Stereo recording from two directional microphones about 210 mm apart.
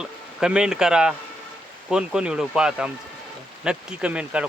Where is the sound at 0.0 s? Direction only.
5° right (ahead or behind).